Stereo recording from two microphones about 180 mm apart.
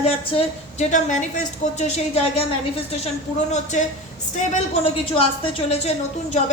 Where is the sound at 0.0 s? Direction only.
35° left (ahead or behind).